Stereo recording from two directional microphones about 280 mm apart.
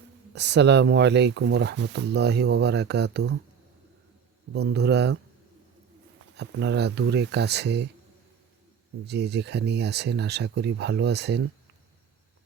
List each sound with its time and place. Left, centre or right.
0.3 s speech: right
4.5 s speech: right
6.3 s speech: right
9.0 s speech: right